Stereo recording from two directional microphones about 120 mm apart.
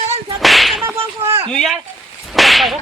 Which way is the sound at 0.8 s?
20° right (ahead or behind).